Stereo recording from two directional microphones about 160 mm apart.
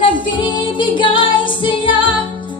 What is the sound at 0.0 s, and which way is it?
Music, 30° left (ahead or behind).